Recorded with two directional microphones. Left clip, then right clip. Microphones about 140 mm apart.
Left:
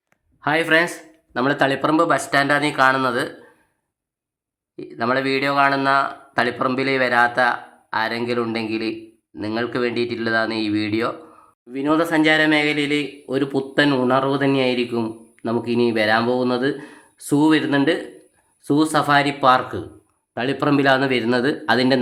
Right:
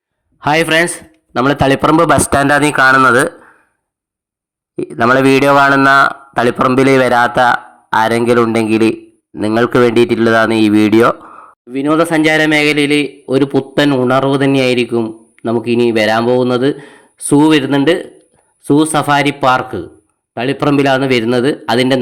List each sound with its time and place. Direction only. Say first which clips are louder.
0.3 s a man's voice: right 6 dB; 55° right (ahead or behind)
2.9 s a man's voice: right 12 dB; 40° right (ahead or behind)
4.8 s a man's voice: right 11 dB; 55° right (ahead or behind)
11.7 s a man's voice: right 7 dB; 45° right (ahead or behind)